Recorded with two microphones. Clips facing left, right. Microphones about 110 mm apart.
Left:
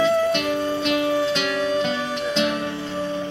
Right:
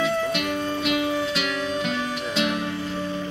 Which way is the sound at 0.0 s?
5° right (ahead or behind).